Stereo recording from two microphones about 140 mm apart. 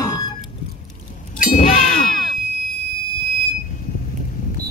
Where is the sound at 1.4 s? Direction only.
70° left (ahead or behind).